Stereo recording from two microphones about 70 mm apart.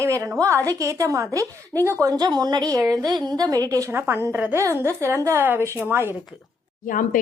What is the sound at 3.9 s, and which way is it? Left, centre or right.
A woman's voice, right.